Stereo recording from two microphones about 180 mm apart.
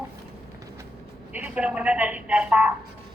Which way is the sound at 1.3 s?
10° right (ahead or behind).